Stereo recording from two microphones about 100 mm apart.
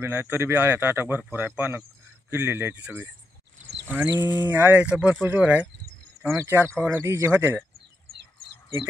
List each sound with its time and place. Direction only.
0.0 s speech: 25° right (ahead or behind)
6.2 s speech: 25° right (ahead or behind)